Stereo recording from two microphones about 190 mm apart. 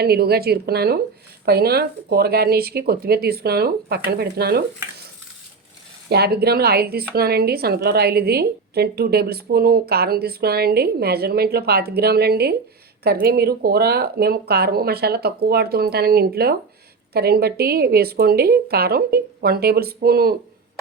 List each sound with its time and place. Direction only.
0.0 s a woman's voice: 55° right (ahead or behind)
6.1 s a woman's voice: 55° right (ahead or behind)